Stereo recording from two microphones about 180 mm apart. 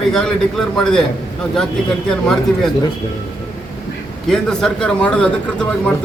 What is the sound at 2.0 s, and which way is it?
Speech, 5° left (ahead or behind).